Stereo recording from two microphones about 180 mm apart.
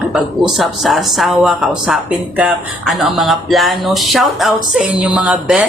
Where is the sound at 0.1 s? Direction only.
Centre (ahead or behind).